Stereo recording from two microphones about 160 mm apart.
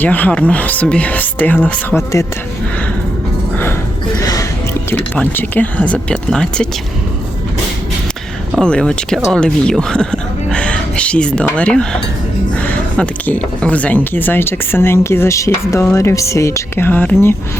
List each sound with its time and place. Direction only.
0.0 s speech: 10° left (ahead or behind)
4.2 s music: 20° left (ahead or behind)
4.9 s speech: 10° left (ahead or behind)
8.5 s speech: 5° left (ahead or behind)